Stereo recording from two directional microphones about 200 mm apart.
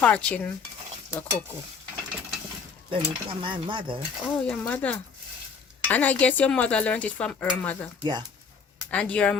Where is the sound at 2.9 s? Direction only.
25° right (ahead or behind).